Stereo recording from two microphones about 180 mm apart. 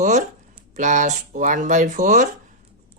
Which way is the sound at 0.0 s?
40° right (ahead or behind).